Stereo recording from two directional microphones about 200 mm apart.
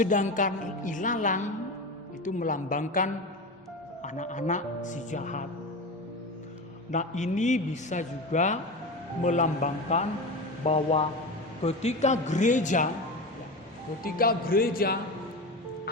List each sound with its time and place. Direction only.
0.0 s a man's voice: 40° left (ahead or behind)
6.9 s a man's voice: 35° left (ahead or behind)
14.0 s speech: 45° left (ahead or behind)